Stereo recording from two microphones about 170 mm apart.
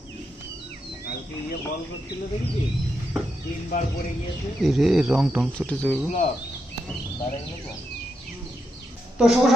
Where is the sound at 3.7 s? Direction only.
45° left (ahead or behind).